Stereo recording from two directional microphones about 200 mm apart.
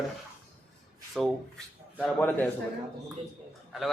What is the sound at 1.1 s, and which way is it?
Speech, centre (ahead or behind).